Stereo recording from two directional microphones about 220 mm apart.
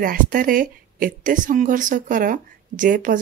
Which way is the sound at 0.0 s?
40° right (ahead or behind).